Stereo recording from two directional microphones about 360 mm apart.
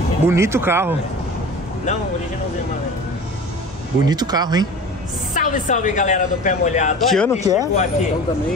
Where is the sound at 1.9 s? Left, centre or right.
Left.